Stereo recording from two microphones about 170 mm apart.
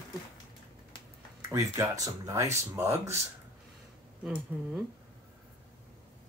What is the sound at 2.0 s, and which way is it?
Speech, 20° right (ahead or behind).